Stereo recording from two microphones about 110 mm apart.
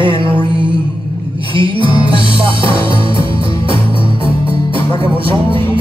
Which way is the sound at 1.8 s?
50° right (ahead or behind).